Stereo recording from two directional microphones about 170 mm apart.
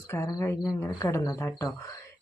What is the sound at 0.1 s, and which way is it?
Speech, 15° left (ahead or behind).